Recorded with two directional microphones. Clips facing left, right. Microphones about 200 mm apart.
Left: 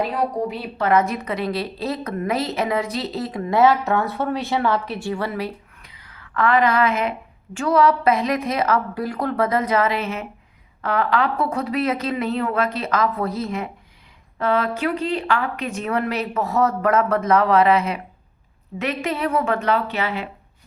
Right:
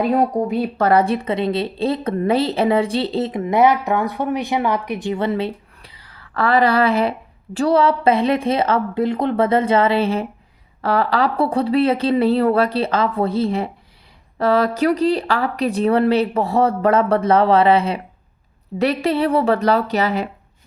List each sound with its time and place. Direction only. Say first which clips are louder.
0.0 s a woman's voice: right 5 dB; 50° right (ahead or behind)